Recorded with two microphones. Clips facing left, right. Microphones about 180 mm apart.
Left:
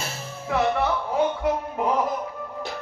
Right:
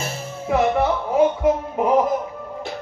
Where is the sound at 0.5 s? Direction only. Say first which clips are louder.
Right 4 dB; 20° right (ahead or behind).